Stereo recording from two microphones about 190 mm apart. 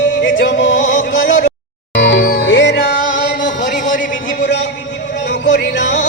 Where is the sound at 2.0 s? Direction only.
70° left (ahead or behind).